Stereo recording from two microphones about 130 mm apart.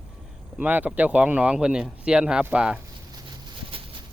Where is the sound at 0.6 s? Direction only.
10° right (ahead or behind).